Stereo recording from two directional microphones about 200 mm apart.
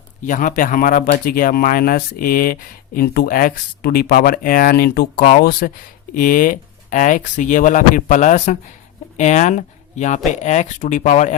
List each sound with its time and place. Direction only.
0.3 s speech: 40° left (ahead or behind)